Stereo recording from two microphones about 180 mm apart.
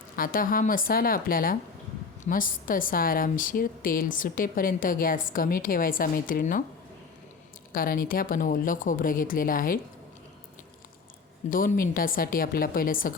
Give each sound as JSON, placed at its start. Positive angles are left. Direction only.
{"t": 0.2, "sound": "a woman's voice", "side_deg": 50}
{"t": 7.7, "sound": "a woman's voice", "side_deg": 50}
{"t": 11.5, "sound": "a woman's voice", "side_deg": 50}